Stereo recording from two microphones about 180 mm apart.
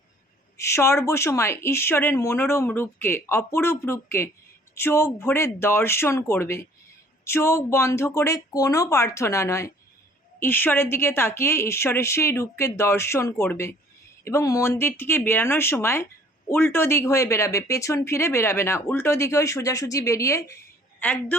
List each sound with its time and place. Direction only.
0.5 s speech: 15° left (ahead or behind)